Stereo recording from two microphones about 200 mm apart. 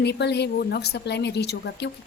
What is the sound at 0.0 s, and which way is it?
A woman's voice, 55° left (ahead or behind).